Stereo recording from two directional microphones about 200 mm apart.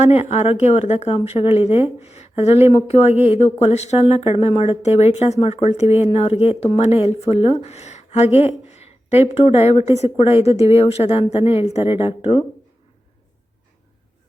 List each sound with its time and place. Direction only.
0.0 s a woman's voice: 35° left (ahead or behind)